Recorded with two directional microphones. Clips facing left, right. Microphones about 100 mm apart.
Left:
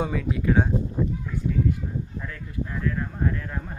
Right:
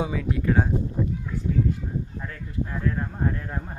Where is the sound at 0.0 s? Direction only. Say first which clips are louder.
Even; centre (ahead or behind).